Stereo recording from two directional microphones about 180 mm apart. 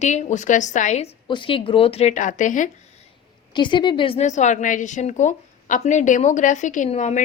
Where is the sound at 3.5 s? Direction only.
25° left (ahead or behind).